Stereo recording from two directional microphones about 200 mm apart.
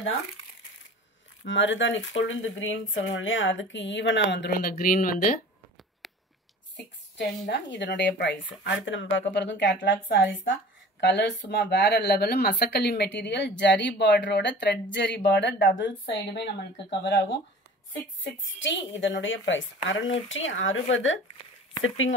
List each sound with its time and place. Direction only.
1.4 s speech: 65° left (ahead or behind); by 5.4 s 45° left (ahead or behind)
6.0 s a sound: centre (ahead or behind)
7.2 s speech: 60° left (ahead or behind)
17.0 s a woman's voice: 60° left (ahead or behind); by 22.1 s 80° left